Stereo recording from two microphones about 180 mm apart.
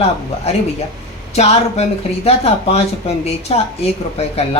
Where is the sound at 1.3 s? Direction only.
35° left (ahead or behind).